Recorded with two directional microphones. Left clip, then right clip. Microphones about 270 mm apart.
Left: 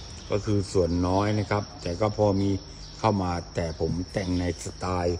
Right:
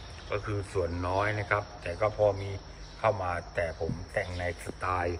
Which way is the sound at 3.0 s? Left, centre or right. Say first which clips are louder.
Left 2 dB; left.